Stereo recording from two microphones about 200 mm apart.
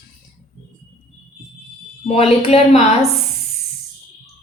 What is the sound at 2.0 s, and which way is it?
A woman's voice, 30° left (ahead or behind).